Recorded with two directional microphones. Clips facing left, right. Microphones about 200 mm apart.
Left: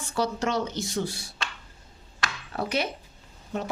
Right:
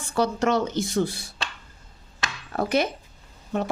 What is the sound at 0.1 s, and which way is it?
Speech, 55° right (ahead or behind).